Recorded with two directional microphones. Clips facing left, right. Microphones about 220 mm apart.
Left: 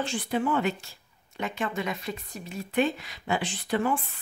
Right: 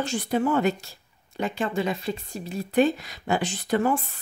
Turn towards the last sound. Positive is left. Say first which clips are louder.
# right 4 dB
turn(degrees=-40)  # may be behind; listen again after turning